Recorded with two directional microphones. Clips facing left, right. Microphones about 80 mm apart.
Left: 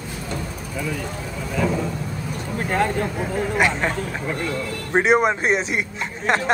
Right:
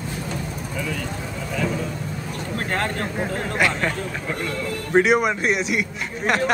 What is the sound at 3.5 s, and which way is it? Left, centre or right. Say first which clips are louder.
Speech: left 1 dB; left.